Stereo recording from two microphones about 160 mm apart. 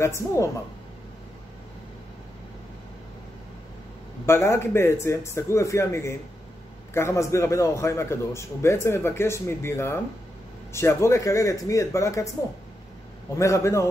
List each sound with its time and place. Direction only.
0.0 s a man's voice: 15° left (ahead or behind)
4.3 s a man's voice: 15° left (ahead or behind)
13.4 s speech: 20° left (ahead or behind)